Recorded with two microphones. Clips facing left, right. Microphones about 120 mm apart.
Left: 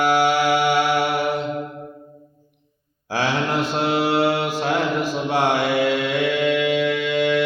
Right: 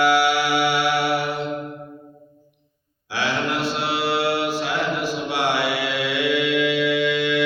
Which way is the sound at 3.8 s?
45° left (ahead or behind).